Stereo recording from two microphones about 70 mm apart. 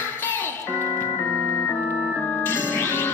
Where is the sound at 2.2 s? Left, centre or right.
Left.